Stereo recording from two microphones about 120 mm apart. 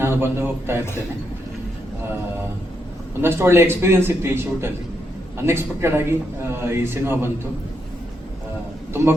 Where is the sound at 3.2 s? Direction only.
20° right (ahead or behind).